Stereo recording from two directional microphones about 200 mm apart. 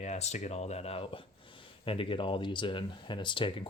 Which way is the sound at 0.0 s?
35° left (ahead or behind).